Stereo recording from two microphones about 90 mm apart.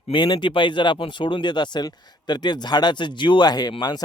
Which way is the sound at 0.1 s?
60° left (ahead or behind).